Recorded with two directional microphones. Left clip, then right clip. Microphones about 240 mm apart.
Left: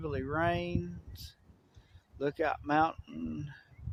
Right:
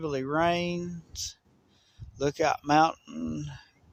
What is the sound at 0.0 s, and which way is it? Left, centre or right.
Speech, right.